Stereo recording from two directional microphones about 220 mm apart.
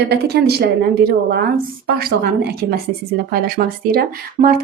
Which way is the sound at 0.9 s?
45° right (ahead or behind).